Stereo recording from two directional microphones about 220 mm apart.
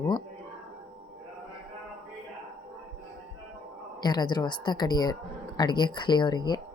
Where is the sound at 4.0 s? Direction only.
20° left (ahead or behind).